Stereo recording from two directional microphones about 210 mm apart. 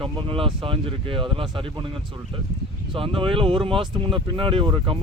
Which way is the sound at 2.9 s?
25° right (ahead or behind).